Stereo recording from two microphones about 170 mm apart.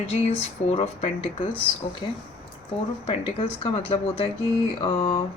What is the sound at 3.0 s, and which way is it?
A woman's voice, 35° left (ahead or behind).